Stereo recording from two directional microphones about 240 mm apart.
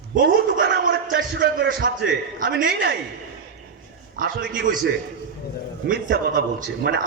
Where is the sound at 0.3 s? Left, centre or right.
Right.